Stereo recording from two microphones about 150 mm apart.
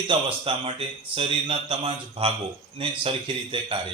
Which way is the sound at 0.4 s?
40° right (ahead or behind).